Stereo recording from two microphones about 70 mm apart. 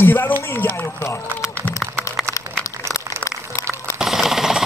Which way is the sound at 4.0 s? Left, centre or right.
Centre.